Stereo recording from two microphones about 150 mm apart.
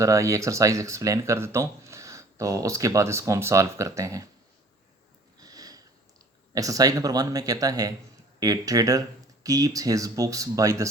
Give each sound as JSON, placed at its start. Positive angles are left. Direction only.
{"t": 0.0, "sound": "speech", "side_deg": -20}
{"t": 5.4, "sound": "sniff", "side_deg": -25}
{"t": 6.5, "sound": "speech", "side_deg": -25}